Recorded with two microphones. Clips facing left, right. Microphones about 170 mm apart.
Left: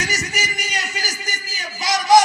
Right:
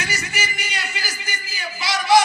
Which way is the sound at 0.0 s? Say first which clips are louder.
Left 2 dB; 40° left (ahead or behind).